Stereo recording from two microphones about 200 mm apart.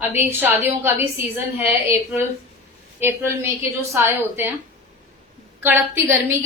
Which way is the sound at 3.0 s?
10° right (ahead or behind).